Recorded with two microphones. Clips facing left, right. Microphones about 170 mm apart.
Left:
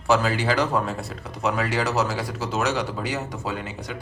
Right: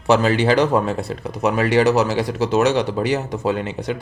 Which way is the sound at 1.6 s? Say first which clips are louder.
Right 12 dB; 70° right (ahead or behind).